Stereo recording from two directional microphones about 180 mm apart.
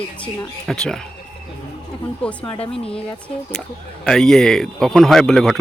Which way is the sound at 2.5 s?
30° left (ahead or behind).